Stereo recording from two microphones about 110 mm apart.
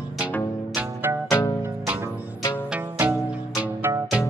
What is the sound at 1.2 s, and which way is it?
Music, 25° left (ahead or behind).